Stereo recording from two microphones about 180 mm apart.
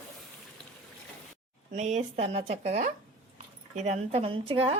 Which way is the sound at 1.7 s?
40° right (ahead or behind).